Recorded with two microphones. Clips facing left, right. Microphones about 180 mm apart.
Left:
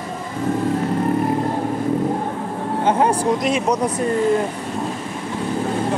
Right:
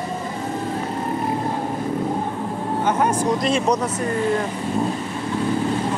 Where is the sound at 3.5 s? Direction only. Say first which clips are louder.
Left 1 dB; 10° left (ahead or behind).